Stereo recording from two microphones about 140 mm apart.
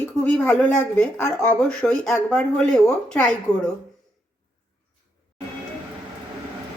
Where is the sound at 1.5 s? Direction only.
5° left (ahead or behind).